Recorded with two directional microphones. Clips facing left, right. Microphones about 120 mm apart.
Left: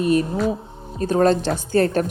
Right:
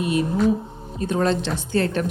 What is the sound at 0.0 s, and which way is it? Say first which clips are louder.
Speech: left 1 dB; 40° left (ahead or behind).